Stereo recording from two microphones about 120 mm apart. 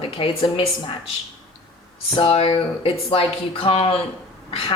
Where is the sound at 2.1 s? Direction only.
45° left (ahead or behind).